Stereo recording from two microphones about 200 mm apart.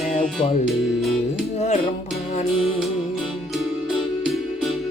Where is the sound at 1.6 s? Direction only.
35° left (ahead or behind).